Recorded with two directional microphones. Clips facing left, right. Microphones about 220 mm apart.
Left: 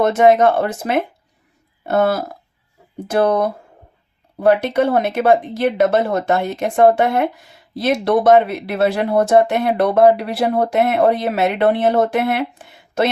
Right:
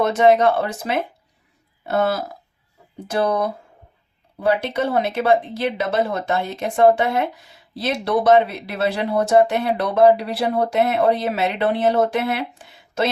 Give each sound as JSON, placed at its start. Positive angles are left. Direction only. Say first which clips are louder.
{"t": 0.0, "sound": "speech", "louder": "left 3 dB", "side_deg": 50}